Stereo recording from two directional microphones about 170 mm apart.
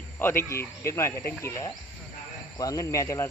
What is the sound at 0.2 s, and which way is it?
Speech, 15° left (ahead or behind).